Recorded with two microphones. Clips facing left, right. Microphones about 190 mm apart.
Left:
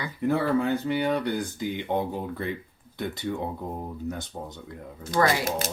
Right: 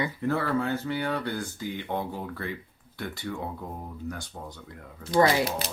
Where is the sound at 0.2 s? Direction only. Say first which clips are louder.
Left 6 dB; 15° left (ahead or behind).